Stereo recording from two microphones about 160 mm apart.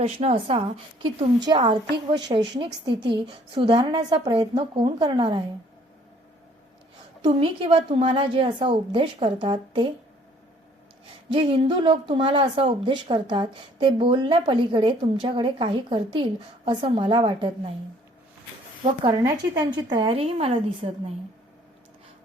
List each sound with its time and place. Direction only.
0.0 s a woman's voice: 40° right (ahead or behind)
7.2 s speech: 30° right (ahead or behind)
11.3 s speech: 35° right (ahead or behind)
19.2 s speech: 25° right (ahead or behind)